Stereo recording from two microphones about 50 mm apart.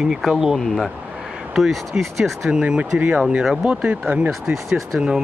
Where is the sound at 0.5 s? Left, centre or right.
Centre.